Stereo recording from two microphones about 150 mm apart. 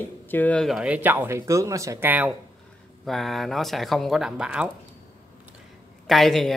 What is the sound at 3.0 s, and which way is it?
Speech, centre (ahead or behind).